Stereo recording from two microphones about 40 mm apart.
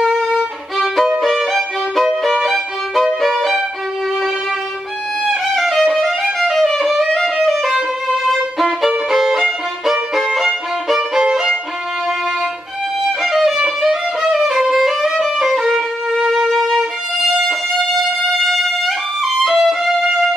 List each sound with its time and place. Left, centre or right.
1.2 s violin: centre
5.2 s violin: centre
7.5 s music: centre
8.3 s violin: centre
11.0 s violin: centre
13.2 s violin: centre
18.5 s music: centre
19.4 s violin: centre